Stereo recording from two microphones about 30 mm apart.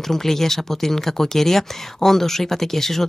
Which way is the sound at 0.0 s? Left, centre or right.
Centre.